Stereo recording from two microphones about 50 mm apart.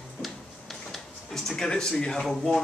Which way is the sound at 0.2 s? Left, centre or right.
Centre.